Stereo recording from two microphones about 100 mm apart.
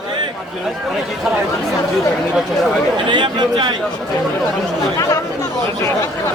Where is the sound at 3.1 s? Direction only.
50° right (ahead or behind).